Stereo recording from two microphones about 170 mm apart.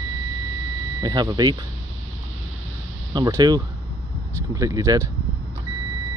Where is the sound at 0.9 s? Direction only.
25° right (ahead or behind).